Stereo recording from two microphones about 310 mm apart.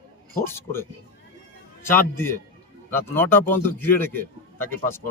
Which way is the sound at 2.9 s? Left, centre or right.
Centre.